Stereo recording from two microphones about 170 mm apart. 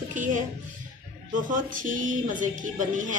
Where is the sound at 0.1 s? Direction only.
50° right (ahead or behind).